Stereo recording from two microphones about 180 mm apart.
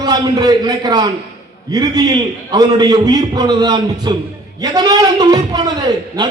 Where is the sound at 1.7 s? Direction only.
20° right (ahead or behind).